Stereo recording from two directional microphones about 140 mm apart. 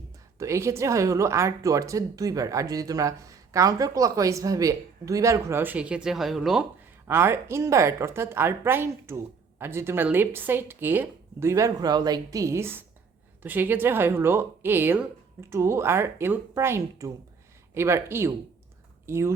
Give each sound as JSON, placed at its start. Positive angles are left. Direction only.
{"t": 0.3, "sound": "speech", "side_deg": -20}
{"t": 7.1, "sound": "a woman's voice", "side_deg": -15}